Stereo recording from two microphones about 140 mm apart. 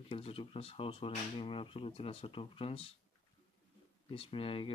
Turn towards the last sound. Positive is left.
turn(degrees=40)  # may be behind; listen again after turning